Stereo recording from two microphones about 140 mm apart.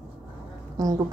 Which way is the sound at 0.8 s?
25° right (ahead or behind).